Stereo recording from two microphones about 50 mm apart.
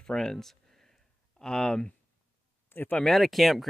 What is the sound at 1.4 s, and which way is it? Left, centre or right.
Speech, centre.